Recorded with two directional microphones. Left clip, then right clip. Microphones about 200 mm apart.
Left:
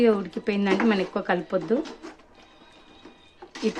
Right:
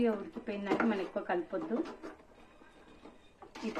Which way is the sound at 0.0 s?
70° left (ahead or behind).